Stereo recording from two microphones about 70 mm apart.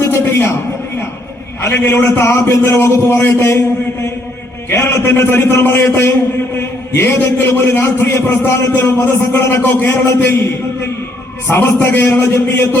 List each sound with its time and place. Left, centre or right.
0.0 s a sound: left
1.6 s a man's voice: left
4.7 s a man's voice: left
7.3 s a man's voice: left
11.4 s a man's voice: left